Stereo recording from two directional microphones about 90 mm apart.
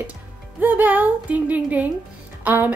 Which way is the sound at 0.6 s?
20° right (ahead or behind).